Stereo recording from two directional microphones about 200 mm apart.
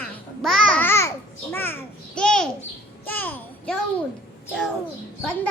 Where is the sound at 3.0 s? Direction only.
10° left (ahead or behind).